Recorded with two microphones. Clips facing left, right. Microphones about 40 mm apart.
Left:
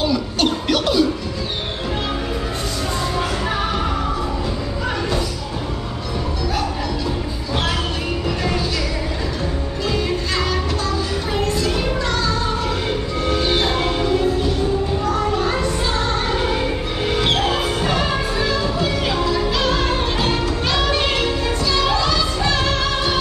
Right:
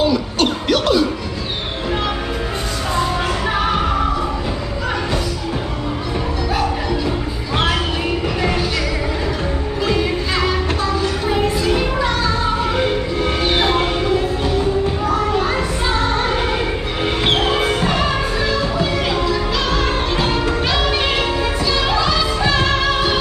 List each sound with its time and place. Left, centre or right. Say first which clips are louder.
0.0 s music: right 2 dB; centre
9.8 s music: right 2 dB; centre
13.4 s music: right 3 dB; right
15.0 s children playing: right 1 dB; centre
16.1 s music: right 3 dB; centre
17.0 s music: right 2 dB; right
17.8 s music: right 2 dB; centre